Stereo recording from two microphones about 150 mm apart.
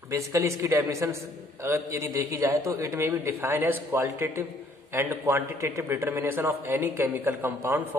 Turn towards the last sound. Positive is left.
turn(degrees=-15)  # may be behind; listen again after turning